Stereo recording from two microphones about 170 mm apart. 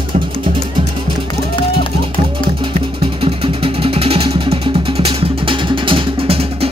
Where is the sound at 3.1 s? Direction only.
30° right (ahead or behind).